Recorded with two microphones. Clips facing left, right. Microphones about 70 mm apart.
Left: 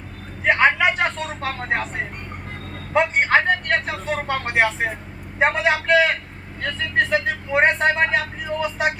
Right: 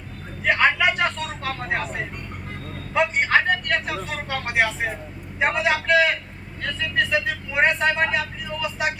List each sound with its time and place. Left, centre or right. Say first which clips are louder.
0.4 s vehicle: left 2 dB; left
2.9 s speech: left 2 dB; left